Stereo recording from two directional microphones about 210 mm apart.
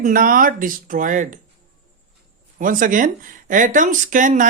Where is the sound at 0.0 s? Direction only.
40° right (ahead or behind).